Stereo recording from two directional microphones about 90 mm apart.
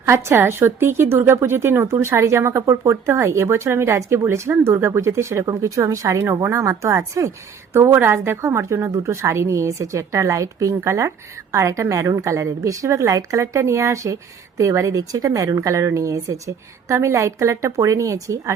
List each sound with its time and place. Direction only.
0.0 s a woman's voice: 30° right (ahead or behind)